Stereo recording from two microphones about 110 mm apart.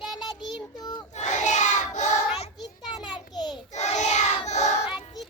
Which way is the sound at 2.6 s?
40° left (ahead or behind).